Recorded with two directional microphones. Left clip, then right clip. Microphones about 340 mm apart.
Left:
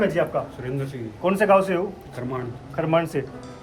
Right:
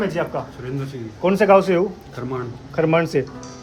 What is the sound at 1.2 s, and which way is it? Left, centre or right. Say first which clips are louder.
Speech: right 4 dB; right.